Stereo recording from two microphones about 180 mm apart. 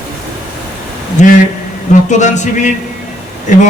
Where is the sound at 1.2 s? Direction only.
40° left (ahead or behind).